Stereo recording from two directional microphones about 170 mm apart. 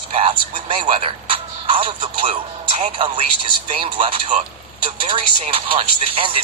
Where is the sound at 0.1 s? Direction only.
35° right (ahead or behind).